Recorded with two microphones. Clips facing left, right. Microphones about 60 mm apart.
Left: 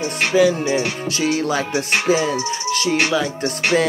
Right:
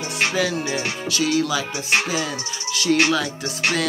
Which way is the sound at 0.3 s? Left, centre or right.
Centre.